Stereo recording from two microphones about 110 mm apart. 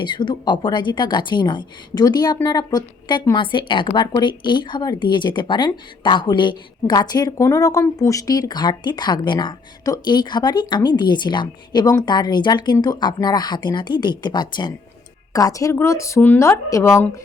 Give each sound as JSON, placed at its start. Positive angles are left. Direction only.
{"t": 0.0, "sound": "a woman's voice", "side_deg": 45}